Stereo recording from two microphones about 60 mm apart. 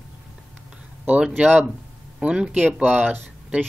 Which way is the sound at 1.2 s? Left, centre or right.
Right.